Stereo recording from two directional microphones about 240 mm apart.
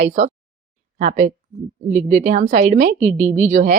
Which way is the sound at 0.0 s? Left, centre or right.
Right.